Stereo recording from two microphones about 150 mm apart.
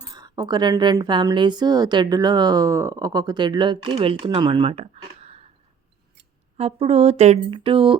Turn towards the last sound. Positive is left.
turn(degrees=-40)  # may be behind; listen again after turning